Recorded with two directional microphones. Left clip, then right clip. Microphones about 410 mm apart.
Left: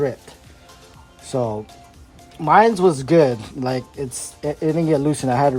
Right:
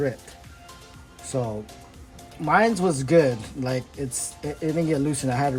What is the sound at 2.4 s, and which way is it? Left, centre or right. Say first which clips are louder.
Speech: left 7 dB; centre.